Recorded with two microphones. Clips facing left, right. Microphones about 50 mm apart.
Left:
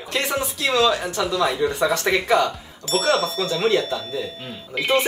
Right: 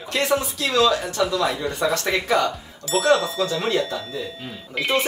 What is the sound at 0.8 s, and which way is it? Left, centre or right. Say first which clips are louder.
Speech: right 2 dB; left.